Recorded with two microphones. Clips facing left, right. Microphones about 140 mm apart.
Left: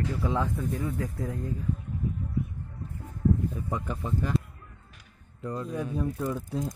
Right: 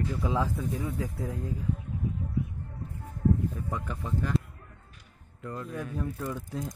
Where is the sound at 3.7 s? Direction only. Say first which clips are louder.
Left 2 dB; 20° left (ahead or behind).